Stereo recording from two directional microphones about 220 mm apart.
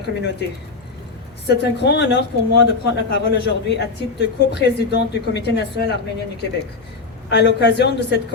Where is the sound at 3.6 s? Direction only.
50° left (ahead or behind).